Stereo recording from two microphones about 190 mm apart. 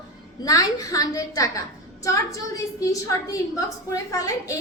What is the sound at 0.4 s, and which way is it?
A woman's voice, 20° left (ahead or behind).